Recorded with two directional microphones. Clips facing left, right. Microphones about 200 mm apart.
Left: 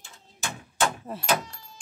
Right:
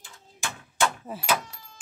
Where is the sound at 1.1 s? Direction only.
5° right (ahead or behind).